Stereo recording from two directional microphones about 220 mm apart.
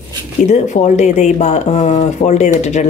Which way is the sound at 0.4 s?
35° left (ahead or behind).